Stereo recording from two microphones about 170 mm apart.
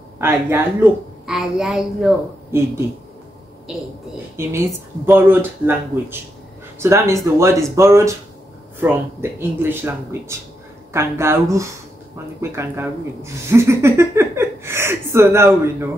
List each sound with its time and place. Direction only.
0.2 s a woman's voice: 10° right (ahead or behind)
3.7 s a woman's voice: 5° right (ahead or behind)
4.4 s speech: 15° right (ahead or behind)